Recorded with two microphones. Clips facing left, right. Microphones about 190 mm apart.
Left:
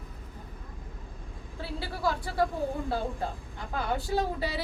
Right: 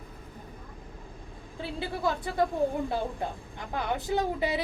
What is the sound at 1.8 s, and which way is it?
Speech, 20° right (ahead or behind).